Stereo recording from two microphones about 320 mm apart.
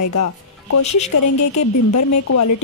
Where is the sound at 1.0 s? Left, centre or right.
Left.